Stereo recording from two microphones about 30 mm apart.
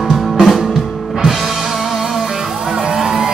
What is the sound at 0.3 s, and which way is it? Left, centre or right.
Music, centre.